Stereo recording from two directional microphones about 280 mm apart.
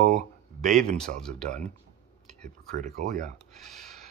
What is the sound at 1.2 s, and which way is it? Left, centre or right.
Speech, centre.